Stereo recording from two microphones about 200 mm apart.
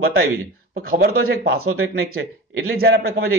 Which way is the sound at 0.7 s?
45° right (ahead or behind).